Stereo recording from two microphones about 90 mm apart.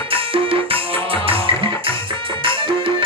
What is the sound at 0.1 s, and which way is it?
Music, 90° right.